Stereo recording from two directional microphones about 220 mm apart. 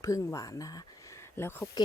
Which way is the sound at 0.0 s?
15° left (ahead or behind).